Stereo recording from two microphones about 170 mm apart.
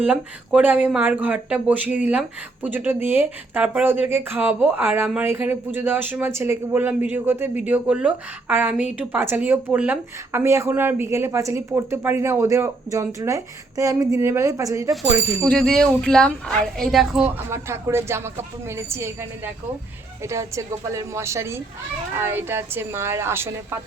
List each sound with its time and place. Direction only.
0.0 s speech: 5° right (ahead or behind)
15.4 s a woman's voice: 5° left (ahead or behind)
17.5 s speech: 15° right (ahead or behind)
20.2 s speech: 15° right (ahead or behind)